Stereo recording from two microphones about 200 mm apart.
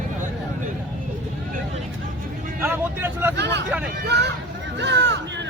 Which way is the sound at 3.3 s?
60° right (ahead or behind).